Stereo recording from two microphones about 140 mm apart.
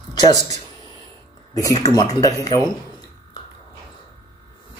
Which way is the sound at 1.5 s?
25° left (ahead or behind).